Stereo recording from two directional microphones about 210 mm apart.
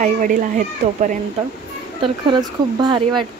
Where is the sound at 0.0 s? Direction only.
40° right (ahead or behind).